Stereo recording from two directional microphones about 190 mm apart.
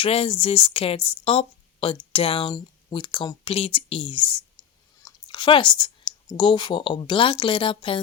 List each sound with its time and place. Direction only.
0.0 s speech: 30° left (ahead or behind)
5.0 s chewing: 25° left (ahead or behind)
6.3 s speech: 25° left (ahead or behind)